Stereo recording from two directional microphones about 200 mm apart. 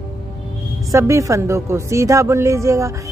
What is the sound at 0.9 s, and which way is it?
A woman's voice, 15° right (ahead or behind).